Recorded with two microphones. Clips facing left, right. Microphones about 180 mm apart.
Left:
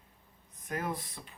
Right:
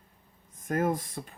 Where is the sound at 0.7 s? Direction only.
45° right (ahead or behind).